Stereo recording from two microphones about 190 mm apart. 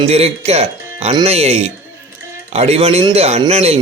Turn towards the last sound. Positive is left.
turn(degrees=-35)  # may be behind; listen again after turning